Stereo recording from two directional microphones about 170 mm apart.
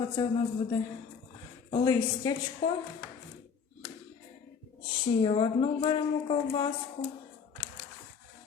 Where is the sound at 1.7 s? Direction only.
25° left (ahead or behind).